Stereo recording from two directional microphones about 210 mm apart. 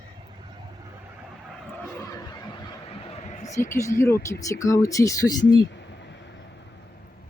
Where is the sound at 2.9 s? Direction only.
30° left (ahead or behind).